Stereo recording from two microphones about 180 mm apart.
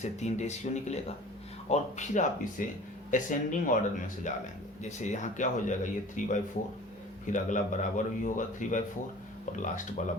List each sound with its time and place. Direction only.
0.0 s a man's voice: 40° left (ahead or behind)